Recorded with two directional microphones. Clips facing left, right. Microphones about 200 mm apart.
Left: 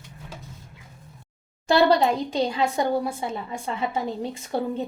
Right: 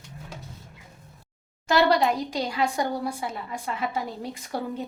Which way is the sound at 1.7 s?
30° left (ahead or behind).